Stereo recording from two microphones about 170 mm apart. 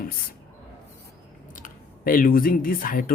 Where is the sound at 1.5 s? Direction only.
55° left (ahead or behind).